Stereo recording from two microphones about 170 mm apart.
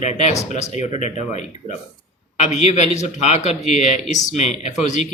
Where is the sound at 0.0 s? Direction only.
45° left (ahead or behind).